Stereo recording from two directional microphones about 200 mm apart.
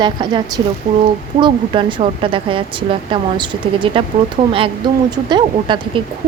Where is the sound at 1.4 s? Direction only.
25° right (ahead or behind).